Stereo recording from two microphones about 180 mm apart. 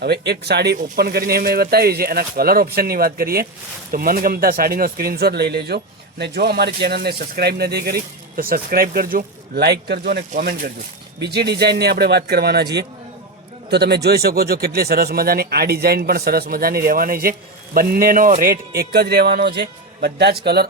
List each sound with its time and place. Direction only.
0.0 s speech: 65° right (ahead or behind)
10.3 s speech: 50° right (ahead or behind)
11.2 s speech: 65° right (ahead or behind)
13.7 s speech: 65° right (ahead or behind)